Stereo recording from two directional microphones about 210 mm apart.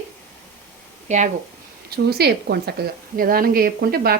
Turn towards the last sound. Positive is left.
turn(degrees=-45)  # may be behind; listen again after turning